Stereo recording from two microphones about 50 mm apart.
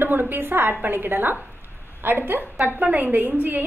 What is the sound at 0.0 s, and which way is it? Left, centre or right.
A woman's voice, right.